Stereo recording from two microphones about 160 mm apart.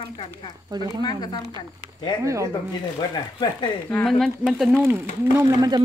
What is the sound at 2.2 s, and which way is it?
Speech, 20° right (ahead or behind).